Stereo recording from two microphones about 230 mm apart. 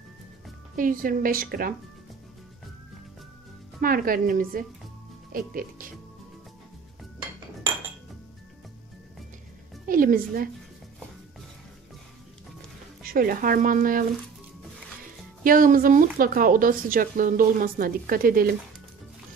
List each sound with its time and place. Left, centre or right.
0.7 s speech: right
3.8 s speech: right
9.8 s a woman's voice: right
13.0 s speech: right
15.4 s speech: right